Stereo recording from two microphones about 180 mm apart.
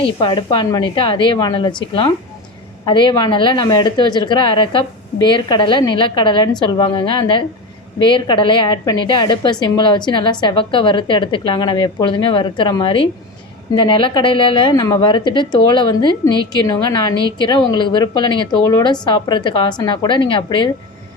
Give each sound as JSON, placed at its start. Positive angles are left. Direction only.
{"t": 0.0, "sound": "a woman's voice", "side_deg": 25}